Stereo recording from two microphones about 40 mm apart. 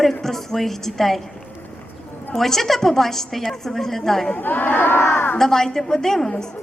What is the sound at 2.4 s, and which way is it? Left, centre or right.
A woman's voice, centre.